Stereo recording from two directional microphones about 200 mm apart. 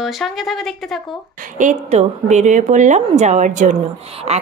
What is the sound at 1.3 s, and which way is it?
A woman's voice, 40° right (ahead or behind).